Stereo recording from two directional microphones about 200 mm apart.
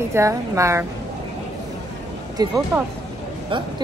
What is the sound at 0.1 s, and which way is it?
Speech, 15° right (ahead or behind).